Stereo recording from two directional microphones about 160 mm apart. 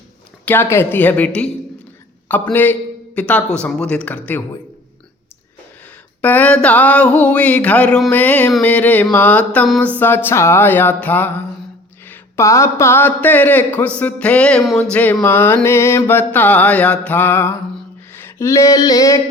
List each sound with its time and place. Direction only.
0.4 s speech: 15° left (ahead or behind)
6.2 s speech: 10° left (ahead or behind)
18.2 s a sound: 15° left (ahead or behind)